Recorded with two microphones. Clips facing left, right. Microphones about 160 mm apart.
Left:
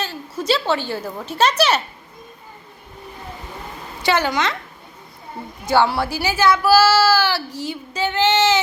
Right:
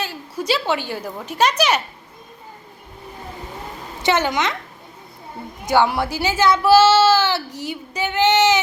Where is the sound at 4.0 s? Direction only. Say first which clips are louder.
Even; 20° right (ahead or behind).